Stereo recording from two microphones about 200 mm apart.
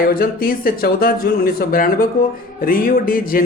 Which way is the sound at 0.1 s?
45° left (ahead or behind).